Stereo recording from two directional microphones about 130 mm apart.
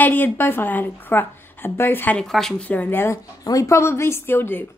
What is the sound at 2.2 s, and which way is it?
A child's voice, centre (ahead or behind).